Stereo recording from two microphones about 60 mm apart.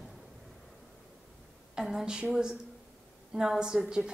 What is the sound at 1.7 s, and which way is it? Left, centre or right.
A woman's voice, centre.